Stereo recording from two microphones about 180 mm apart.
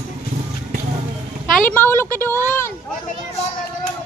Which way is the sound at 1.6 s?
10° left (ahead or behind).